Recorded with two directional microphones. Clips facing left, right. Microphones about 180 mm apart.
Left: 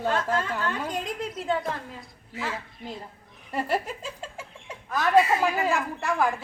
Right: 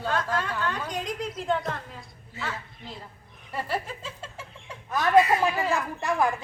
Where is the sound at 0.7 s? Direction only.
5° left (ahead or behind).